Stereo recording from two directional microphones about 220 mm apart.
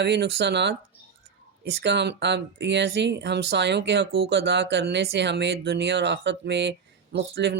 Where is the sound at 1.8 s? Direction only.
50° right (ahead or behind).